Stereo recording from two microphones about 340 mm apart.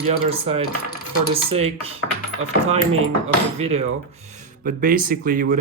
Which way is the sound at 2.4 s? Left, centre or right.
Right.